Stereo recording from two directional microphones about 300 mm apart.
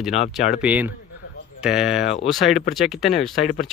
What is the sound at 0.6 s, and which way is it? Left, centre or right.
Speech, centre.